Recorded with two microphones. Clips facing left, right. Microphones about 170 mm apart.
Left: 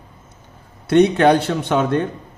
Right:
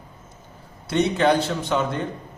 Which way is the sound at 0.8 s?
65° left (ahead or behind).